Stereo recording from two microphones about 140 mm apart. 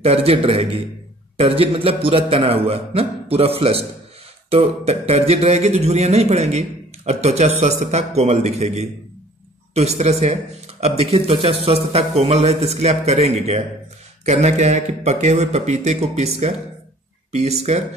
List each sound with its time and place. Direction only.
0.0 s a man's voice: 45° right (ahead or behind)